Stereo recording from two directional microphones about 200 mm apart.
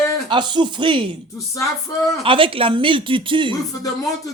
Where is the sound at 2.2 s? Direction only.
25° right (ahead or behind).